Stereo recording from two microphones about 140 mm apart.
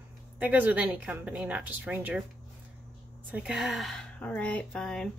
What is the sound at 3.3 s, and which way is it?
Speech, 5° right (ahead or behind).